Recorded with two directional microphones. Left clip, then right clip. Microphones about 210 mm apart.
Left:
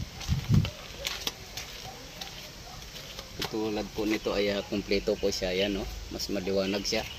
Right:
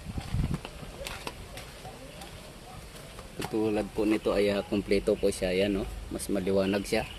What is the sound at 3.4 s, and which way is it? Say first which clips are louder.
Speech: right 3 dB; 20° right (ahead or behind).